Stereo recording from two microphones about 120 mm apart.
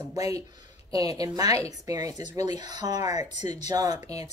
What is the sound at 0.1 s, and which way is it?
Speech, 30° right (ahead or behind).